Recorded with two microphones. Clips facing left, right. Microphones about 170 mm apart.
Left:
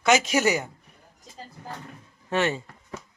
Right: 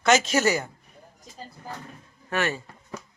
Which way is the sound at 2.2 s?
25° left (ahead or behind).